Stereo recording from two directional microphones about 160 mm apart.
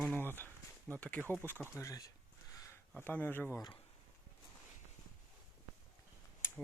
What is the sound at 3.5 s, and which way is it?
Cutlery, 25° left (ahead or behind).